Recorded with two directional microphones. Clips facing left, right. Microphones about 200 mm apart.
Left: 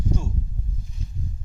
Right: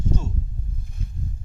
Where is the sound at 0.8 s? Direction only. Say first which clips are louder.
Right 1 dB; 55° right (ahead or behind).